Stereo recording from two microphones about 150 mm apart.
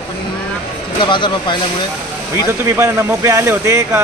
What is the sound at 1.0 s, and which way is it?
Speech, 30° left (ahead or behind).